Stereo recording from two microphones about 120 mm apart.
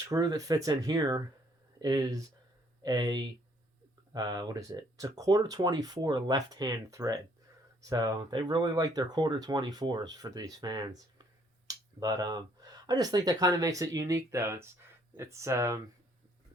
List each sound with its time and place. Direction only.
0.0 s speech: 30° right (ahead or behind)